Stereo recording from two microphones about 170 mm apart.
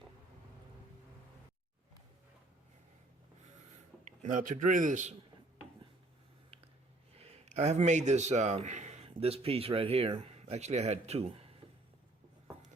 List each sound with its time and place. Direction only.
4.2 s a man's voice: 50° right (ahead or behind)
7.2 s a man's voice: 40° right (ahead or behind)